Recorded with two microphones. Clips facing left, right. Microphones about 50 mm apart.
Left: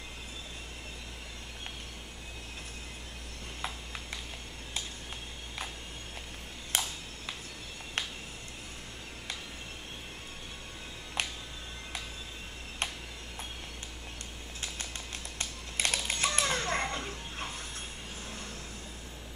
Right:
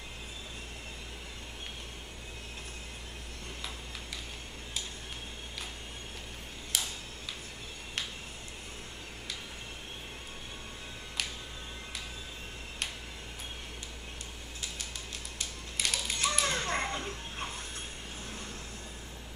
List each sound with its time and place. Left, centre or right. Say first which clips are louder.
6.7 s tick-tock: left 2 dB; left
15.3 s a sound: left 3 dB; left
16.3 s children playing: even; centre